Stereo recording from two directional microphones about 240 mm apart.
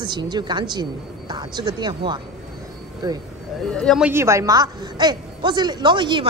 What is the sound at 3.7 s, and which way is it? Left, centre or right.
A woman's voice, centre.